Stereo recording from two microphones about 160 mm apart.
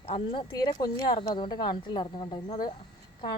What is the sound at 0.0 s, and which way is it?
Speech, 35° left (ahead or behind).